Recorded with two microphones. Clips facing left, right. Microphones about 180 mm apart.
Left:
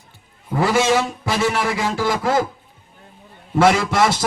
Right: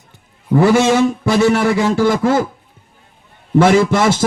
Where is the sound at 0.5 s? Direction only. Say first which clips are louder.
Right 6 dB; 45° right (ahead or behind).